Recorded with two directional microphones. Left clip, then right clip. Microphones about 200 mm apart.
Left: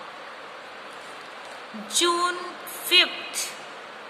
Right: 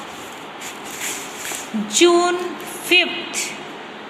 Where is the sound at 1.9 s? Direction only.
15° left (ahead or behind).